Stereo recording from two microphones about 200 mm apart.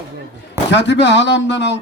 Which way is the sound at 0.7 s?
60° left (ahead or behind).